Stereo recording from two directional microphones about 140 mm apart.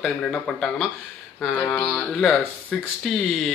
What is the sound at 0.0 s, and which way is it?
Speech, 5° left (ahead or behind).